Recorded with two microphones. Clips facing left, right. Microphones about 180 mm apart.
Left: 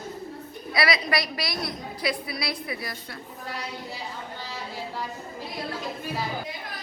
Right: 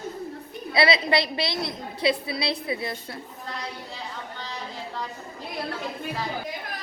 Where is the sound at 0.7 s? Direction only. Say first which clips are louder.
Right 4 dB; 25° right (ahead or behind).